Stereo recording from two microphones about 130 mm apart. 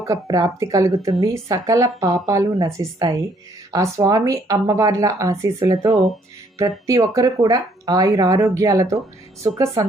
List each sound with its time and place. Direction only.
0.0 s speech: 25° right (ahead or behind)